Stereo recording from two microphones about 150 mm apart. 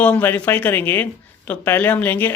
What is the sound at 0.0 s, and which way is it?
Speech, 10° left (ahead or behind).